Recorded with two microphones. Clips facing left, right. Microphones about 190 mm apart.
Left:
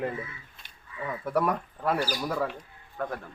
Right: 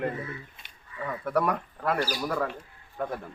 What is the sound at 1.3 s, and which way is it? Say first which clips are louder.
Speech: even; 5° left (ahead or behind).